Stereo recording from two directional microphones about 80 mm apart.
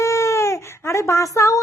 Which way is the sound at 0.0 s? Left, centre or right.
Left.